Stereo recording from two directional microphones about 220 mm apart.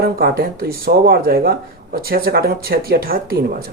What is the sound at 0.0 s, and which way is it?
Speech, 40° right (ahead or behind).